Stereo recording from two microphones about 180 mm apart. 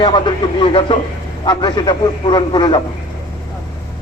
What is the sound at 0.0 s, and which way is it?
A man's voice, 25° left (ahead or behind).